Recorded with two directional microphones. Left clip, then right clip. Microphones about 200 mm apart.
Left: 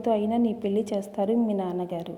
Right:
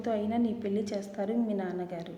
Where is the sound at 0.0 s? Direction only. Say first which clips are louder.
Left 6 dB; 25° left (ahead or behind).